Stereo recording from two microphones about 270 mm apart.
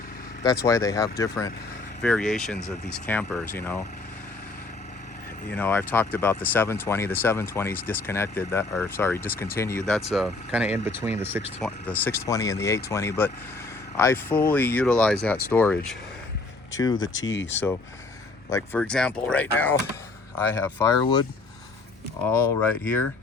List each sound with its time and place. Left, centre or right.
0.6 s speech: centre
5.5 s speech: centre
11.6 s speech: centre
16.7 s speech: centre
17.1 s speech: left
18.5 s speech: centre
22.6 s speech: centre